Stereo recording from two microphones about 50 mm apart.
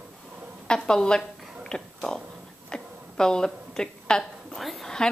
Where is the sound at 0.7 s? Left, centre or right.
Centre.